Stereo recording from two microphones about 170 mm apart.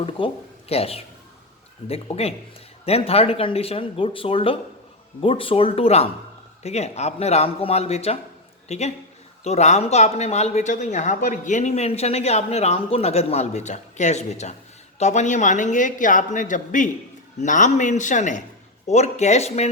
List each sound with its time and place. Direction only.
0.2 s a woman's voice: 30° left (ahead or behind)